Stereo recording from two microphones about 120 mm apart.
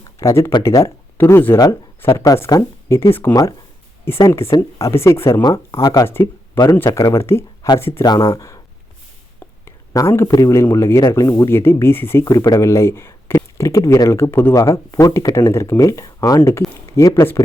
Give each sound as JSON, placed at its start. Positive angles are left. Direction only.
{"t": 0.2, "sound": "speech", "side_deg": 25}
{"t": 4.3, "sound": "speech", "side_deg": 20}
{"t": 5.4, "sound": "speech", "side_deg": 35}
{"t": 6.1, "sound": "speech", "side_deg": 20}
{"t": 8.0, "sound": "speech", "side_deg": 35}
{"t": 9.6, "sound": "speech", "side_deg": 25}